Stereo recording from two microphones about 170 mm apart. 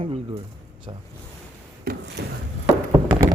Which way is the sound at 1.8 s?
65° right (ahead or behind).